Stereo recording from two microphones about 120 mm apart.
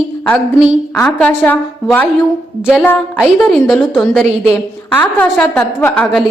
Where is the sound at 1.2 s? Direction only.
15° left (ahead or behind).